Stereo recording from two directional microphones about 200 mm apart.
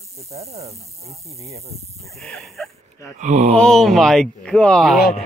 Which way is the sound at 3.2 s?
35° right (ahead or behind).